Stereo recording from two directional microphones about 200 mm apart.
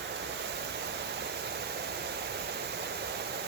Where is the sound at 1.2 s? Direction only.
55° right (ahead or behind).